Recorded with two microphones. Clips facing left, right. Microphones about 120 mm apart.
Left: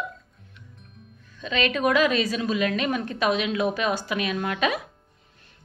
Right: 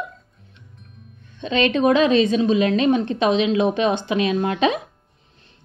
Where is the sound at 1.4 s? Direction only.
30° right (ahead or behind).